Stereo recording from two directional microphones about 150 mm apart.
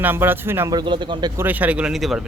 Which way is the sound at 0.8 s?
30° right (ahead or behind).